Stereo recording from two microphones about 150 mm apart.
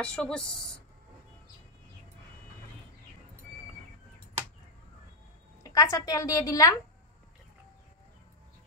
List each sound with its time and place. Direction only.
0.0 s a woman's voice: 5° left (ahead or behind)
5.6 s a woman's voice: 25° left (ahead or behind)